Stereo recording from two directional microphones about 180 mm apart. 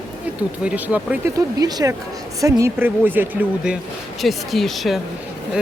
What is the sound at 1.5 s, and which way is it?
Speech, 20° right (ahead or behind).